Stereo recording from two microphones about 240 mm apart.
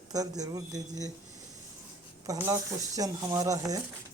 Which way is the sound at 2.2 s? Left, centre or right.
Centre.